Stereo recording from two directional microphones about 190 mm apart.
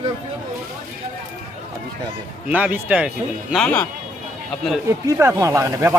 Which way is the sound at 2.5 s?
10° right (ahead or behind).